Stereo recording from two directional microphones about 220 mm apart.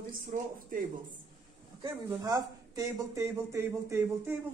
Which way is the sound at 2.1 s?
15° right (ahead or behind).